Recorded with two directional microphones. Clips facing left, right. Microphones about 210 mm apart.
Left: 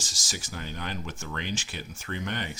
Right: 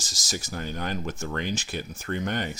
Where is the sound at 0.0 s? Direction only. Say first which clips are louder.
Right 5 dB; 40° right (ahead or behind).